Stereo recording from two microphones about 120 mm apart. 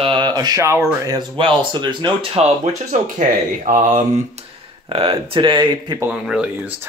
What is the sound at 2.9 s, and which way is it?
Speech, 90° right.